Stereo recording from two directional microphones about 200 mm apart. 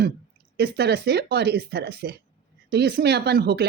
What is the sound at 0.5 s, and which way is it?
Speech, 55° right (ahead or behind).